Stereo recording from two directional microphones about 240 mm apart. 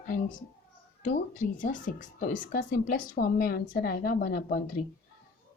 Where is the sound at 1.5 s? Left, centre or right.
Left.